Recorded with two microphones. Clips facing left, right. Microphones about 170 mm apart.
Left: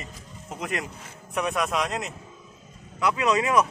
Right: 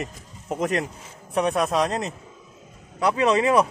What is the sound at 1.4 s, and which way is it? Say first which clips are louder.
A man's voice: right 5 dB; 30° right (ahead or behind).